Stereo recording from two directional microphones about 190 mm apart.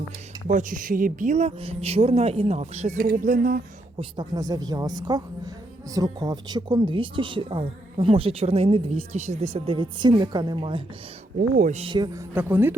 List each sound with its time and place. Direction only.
0.4 s speech: 45° right (ahead or behind)
4.2 s speech: 20° right (ahead or behind)
11.3 s speech: 50° right (ahead or behind)
11.7 s speech: 30° right (ahead or behind)
12.3 s speech: 10° right (ahead or behind)